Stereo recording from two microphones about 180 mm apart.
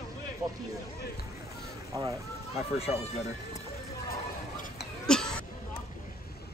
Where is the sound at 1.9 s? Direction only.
15° right (ahead or behind).